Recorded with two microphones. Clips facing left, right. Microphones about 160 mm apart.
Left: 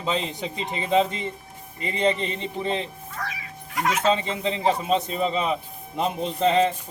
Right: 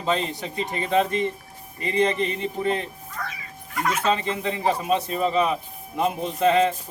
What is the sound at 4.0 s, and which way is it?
A man's voice, 25° left (ahead or behind).